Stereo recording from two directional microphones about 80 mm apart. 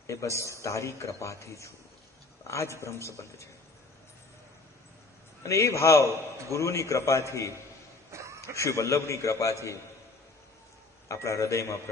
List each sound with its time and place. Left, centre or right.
0.0 s a man's voice: left
5.4 s a man's voice: left
8.1 s a sound: right
8.5 s a man's voice: left
11.1 s a man's voice: left